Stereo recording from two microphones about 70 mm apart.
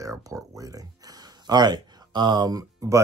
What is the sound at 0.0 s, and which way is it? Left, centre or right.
Speech, right.